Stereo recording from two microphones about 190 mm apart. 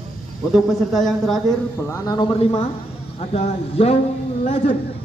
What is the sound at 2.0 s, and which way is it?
A man's voice, 20° left (ahead or behind).